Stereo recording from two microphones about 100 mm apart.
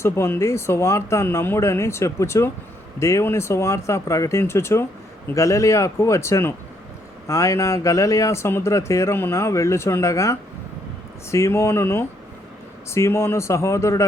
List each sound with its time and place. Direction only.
0.0 s speech: 25° left (ahead or behind)